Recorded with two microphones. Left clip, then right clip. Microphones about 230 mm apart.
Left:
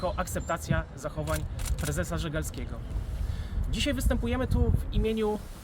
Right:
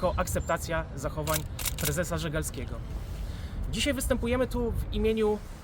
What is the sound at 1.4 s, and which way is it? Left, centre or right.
Speech, right.